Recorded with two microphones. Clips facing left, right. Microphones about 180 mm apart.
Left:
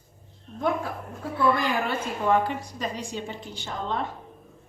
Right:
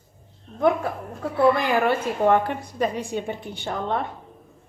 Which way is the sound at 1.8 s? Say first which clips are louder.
Right 7 dB; 60° right (ahead or behind).